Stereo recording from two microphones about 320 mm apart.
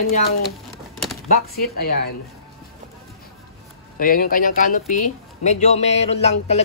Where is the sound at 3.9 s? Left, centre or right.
Left.